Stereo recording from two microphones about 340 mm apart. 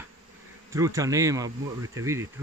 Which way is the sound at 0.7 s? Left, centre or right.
Centre.